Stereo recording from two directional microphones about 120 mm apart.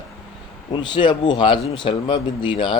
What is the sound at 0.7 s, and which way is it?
Speech, 40° left (ahead or behind).